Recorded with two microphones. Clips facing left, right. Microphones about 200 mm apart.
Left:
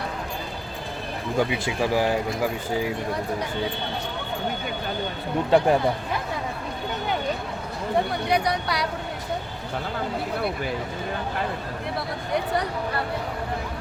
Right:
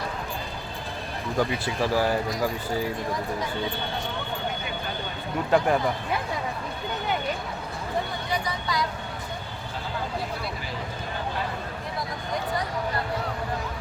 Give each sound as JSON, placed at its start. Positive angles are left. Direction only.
{"t": 1.4, "sound": "speech", "side_deg": 15}
{"t": 5.5, "sound": "speech", "side_deg": 25}
{"t": 8.3, "sound": "speech", "side_deg": 70}